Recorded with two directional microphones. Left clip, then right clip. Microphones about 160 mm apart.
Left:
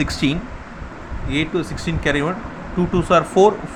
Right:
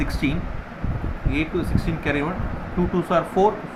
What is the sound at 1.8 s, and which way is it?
Speech, 40° left (ahead or behind).